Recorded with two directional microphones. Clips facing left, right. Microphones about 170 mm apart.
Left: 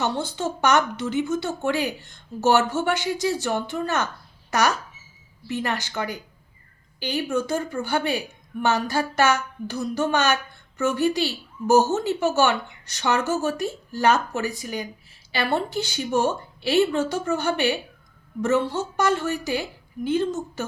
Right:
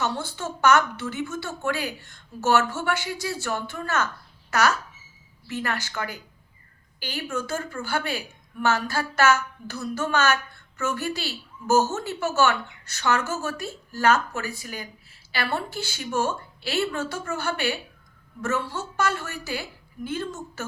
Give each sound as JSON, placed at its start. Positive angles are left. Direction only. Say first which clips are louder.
{"t": 0.0, "sound": "a woman's voice", "louder": "left 3 dB", "side_deg": 20}